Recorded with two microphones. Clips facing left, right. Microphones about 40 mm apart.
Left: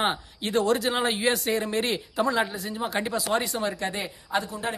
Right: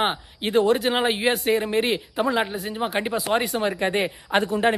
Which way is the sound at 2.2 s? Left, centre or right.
Right.